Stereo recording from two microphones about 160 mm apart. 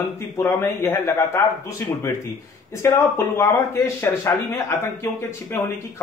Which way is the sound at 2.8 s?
15° left (ahead or behind).